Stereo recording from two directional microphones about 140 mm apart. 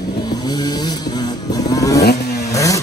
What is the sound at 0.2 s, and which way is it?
Vehicle, 30° left (ahead or behind).